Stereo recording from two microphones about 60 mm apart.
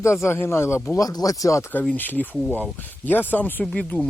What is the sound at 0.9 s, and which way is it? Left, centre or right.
Speech, left.